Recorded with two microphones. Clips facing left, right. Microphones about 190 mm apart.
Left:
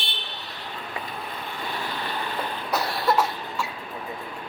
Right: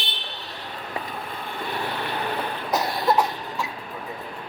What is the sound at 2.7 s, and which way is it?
Cough, 20° right (ahead or behind).